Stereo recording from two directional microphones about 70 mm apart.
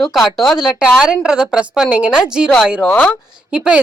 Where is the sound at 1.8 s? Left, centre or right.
Centre.